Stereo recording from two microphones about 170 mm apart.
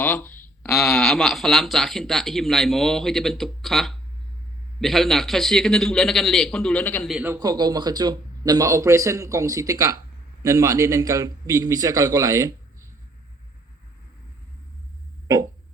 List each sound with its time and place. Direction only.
0.0 s a sound: 10° left (ahead or behind)
0.8 s speech: centre (ahead or behind)
7.1 s a man's voice: 10° right (ahead or behind)
7.3 s a man's voice: 25° right (ahead or behind)